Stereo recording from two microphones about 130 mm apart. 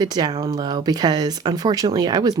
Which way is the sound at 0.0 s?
30° right (ahead or behind).